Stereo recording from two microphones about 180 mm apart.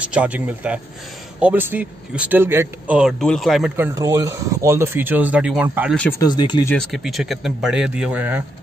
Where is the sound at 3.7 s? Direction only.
15° right (ahead or behind).